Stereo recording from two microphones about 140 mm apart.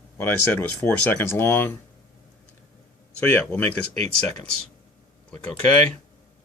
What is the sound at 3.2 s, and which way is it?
Speech, 10° left (ahead or behind).